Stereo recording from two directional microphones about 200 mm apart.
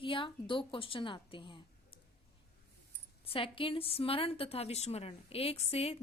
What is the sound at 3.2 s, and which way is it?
A woman's voice, 25° left (ahead or behind).